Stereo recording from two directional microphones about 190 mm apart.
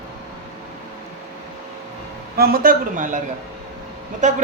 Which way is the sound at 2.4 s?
50° right (ahead or behind).